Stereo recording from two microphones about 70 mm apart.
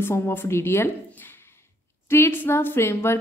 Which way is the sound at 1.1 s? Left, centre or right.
Left.